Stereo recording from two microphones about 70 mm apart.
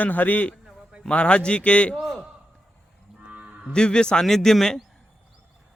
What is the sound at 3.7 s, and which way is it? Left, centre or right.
A man's voice, centre.